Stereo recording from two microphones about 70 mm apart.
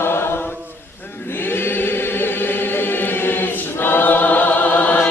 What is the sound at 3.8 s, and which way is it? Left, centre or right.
Choir, left.